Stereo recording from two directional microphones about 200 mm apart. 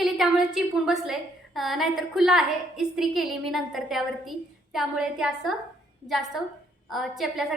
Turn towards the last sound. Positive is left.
turn(degrees=0)  # may be behind; listen again after turning